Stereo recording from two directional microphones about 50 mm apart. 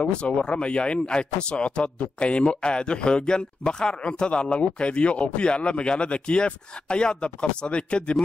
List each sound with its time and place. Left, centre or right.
0.0 s speech: centre